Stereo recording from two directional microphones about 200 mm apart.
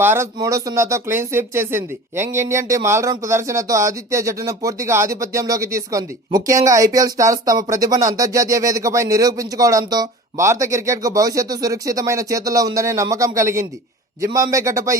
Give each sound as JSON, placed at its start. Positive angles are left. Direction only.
{"t": 0.0, "sound": "speech", "side_deg": -10}